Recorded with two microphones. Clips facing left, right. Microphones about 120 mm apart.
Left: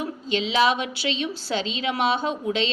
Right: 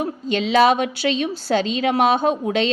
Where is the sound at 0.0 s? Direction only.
50° right (ahead or behind).